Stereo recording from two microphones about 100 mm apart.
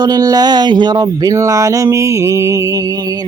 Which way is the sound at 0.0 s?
40° right (ahead or behind).